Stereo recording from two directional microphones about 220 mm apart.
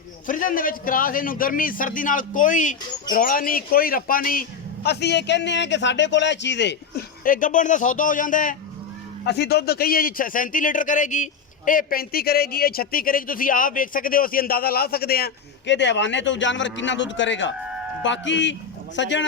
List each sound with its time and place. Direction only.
0.3 s a man's voice: 40° left (ahead or behind)
9.2 s a man's voice: 50° left (ahead or behind)